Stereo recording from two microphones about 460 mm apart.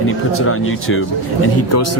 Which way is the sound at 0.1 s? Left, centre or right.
Left.